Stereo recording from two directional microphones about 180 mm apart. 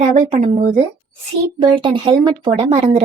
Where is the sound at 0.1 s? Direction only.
45° right (ahead or behind).